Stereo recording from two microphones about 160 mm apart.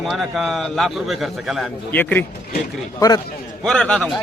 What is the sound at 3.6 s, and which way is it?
Speech, 5° left (ahead or behind).